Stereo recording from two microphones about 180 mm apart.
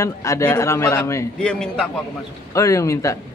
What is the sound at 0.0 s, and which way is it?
Speech, 15° left (ahead or behind).